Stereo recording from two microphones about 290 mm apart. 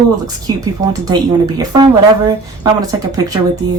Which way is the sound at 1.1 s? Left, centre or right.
Centre.